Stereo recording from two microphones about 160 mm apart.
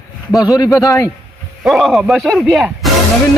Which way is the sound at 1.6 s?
Centre (ahead or behind).